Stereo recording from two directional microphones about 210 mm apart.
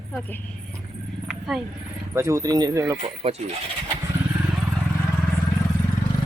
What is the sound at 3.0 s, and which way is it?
Speech, 30° right (ahead or behind).